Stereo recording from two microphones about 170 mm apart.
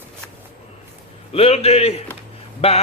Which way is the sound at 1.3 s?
35° left (ahead or behind).